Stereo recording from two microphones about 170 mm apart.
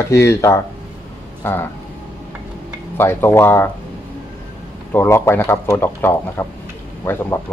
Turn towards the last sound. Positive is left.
turn(degrees=15)  # may be behind; listen again after turning